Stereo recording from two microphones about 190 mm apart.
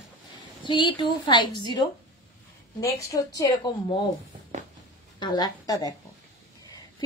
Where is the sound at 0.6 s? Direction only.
25° left (ahead or behind).